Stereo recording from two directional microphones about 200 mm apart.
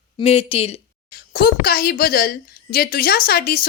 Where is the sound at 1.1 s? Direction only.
50° left (ahead or behind).